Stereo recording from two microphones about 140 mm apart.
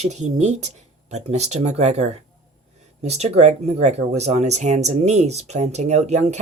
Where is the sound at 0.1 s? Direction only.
55° right (ahead or behind).